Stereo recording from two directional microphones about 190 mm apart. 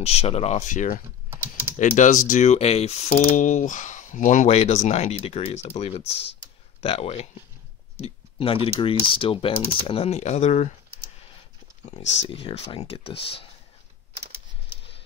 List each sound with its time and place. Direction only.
0.0 s speech: 35° left (ahead or behind)
1.3 s typing: 10° right (ahead or behind)
1.8 s speech: 40° left (ahead or behind)
8.0 s a sound: 30° left (ahead or behind)
9.0 s speech: 30° left (ahead or behind)
12.0 s speech: 30° left (ahead or behind)